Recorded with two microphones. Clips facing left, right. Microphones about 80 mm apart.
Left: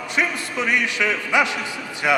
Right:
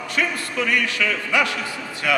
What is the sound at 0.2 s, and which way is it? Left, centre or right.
A man's voice, centre.